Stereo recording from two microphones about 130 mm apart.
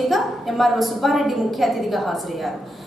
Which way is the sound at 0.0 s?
Centre (ahead or behind).